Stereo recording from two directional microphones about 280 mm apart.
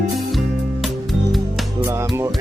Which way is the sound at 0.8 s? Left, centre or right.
Centre.